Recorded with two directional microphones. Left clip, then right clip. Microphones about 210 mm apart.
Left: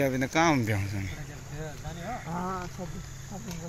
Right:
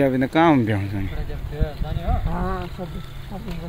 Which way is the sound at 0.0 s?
10° right (ahead or behind).